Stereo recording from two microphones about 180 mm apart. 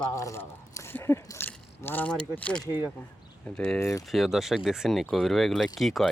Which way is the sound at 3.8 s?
15° left (ahead or behind).